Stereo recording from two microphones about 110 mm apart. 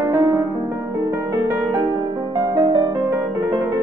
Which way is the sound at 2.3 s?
40° right (ahead or behind).